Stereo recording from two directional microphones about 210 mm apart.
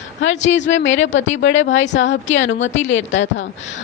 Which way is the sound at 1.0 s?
65° left (ahead or behind).